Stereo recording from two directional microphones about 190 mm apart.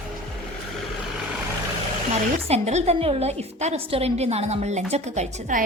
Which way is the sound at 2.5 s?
35° right (ahead or behind).